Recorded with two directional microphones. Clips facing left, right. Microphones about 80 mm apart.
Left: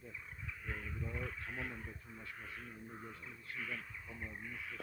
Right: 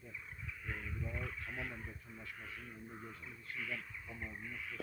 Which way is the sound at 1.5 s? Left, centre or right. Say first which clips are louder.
Even; left.